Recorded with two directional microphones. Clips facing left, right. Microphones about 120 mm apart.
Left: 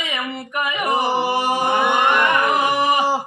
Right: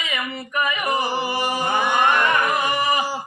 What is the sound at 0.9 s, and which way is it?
Music, 65° left (ahead or behind).